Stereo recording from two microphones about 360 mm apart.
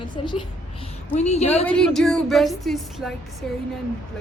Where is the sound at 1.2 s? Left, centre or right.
Centre.